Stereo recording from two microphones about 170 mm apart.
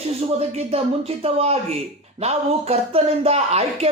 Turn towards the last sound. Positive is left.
turn(degrees=-40)  # may be behind; listen again after turning